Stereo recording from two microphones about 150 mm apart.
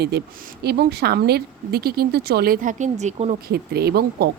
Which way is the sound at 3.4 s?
90° right.